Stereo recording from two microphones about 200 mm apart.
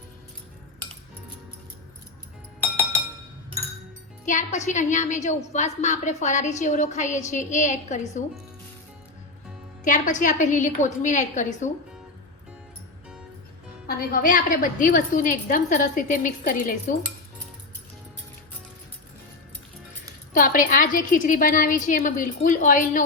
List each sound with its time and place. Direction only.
4.3 s a woman's voice: 35° left (ahead or behind)
9.8 s a woman's voice: 40° left (ahead or behind)
13.8 s a woman's voice: 45° left (ahead or behind)
20.3 s a woman's voice: 45° left (ahead or behind)